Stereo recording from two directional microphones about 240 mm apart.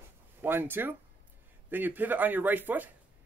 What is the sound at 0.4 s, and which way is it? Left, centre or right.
Speech, centre.